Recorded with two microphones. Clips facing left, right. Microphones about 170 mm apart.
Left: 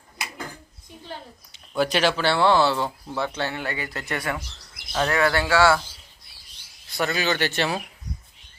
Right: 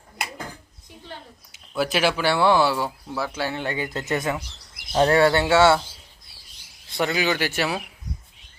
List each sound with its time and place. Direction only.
1.5 s speech: 5° right (ahead or behind); by 5.8 s 25° right (ahead or behind)
6.9 s speech: 15° right (ahead or behind)